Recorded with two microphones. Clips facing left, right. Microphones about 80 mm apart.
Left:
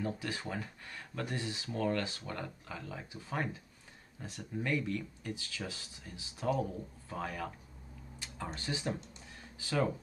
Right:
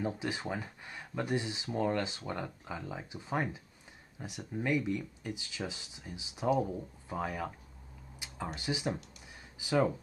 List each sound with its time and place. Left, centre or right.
0.0 s speech: centre